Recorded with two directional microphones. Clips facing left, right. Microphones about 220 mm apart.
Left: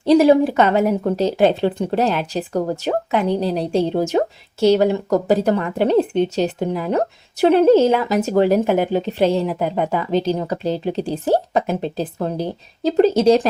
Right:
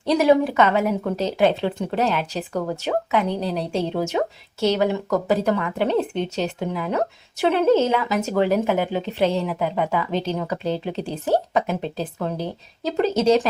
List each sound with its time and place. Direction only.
0.0 s speech: 30° left (ahead or behind)